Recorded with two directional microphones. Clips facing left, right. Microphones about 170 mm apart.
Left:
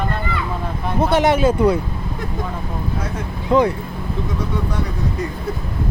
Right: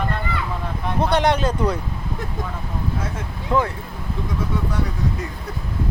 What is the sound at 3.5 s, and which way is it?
Speech, 15° left (ahead or behind).